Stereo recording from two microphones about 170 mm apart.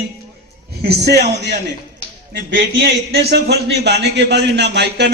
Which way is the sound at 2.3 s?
90° right.